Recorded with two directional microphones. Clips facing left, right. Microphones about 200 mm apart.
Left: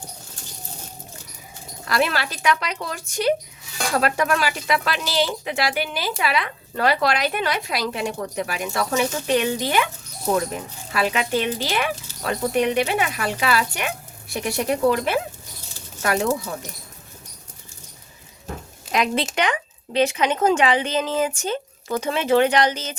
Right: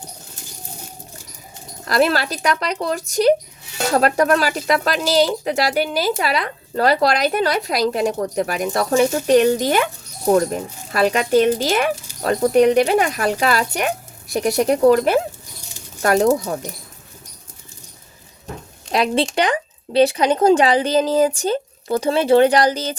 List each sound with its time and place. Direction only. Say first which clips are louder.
1.8 s speech: right 5 dB; 40° right (ahead or behind)
18.9 s speech: right 4 dB; 35° right (ahead or behind)